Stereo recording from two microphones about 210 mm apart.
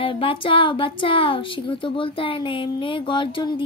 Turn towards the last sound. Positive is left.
turn(degrees=25)  # may be behind; listen again after turning